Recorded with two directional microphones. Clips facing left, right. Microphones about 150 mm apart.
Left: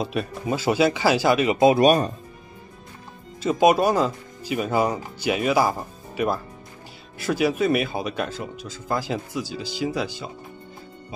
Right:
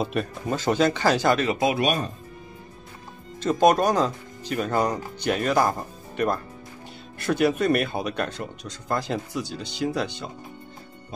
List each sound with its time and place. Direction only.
0.0 s speech: centre (ahead or behind)
1.6 s speech: 35° left (ahead or behind)
3.3 s speech: 5° left (ahead or behind)